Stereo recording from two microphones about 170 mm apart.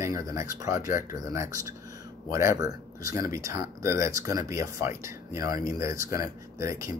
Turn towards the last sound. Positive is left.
turn(degrees=-15)  # may be behind; listen again after turning